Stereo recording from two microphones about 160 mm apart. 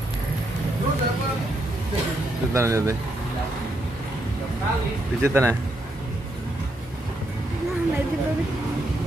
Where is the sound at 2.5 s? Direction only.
15° right (ahead or behind).